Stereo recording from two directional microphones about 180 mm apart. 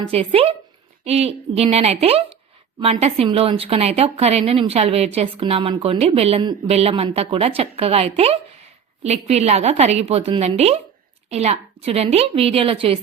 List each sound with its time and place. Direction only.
0.1 s speech: 30° right (ahead or behind)